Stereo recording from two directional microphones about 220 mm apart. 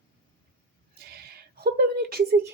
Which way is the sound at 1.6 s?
45° right (ahead or behind).